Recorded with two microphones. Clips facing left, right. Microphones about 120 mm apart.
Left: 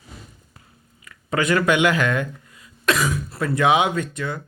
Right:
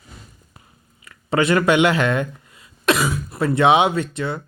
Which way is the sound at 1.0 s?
25° right (ahead or behind).